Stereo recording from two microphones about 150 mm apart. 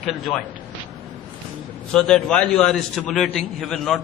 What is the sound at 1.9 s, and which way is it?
A man's voice, centre (ahead or behind).